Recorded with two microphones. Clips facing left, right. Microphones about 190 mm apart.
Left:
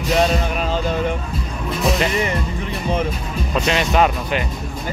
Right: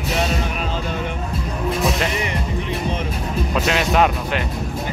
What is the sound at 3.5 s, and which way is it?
Speech, centre (ahead or behind).